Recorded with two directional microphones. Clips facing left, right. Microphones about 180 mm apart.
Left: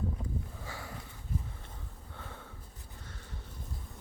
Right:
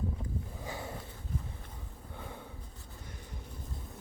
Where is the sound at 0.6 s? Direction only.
20° right (ahead or behind).